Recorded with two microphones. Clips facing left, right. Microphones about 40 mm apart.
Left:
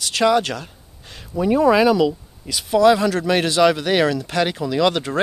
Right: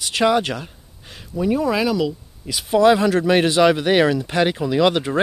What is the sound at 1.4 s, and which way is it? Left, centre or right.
Speech, centre.